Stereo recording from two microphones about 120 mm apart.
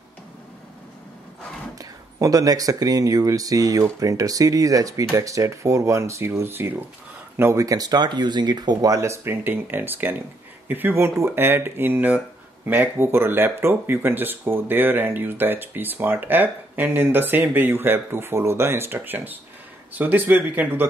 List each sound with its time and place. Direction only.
1.8 s speech: 30° right (ahead or behind)